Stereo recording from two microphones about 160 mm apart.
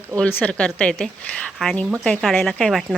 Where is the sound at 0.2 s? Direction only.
10° left (ahead or behind).